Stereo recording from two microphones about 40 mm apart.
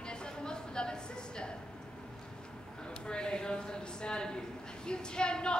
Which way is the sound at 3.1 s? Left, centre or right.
Left.